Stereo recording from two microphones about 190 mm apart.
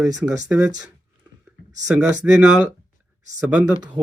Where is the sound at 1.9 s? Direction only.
5° right (ahead or behind).